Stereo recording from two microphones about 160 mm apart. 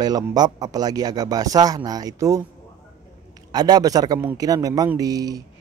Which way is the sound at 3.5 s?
25° right (ahead or behind).